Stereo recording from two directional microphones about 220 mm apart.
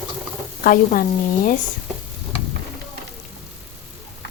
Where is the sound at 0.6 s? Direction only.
40° left (ahead or behind).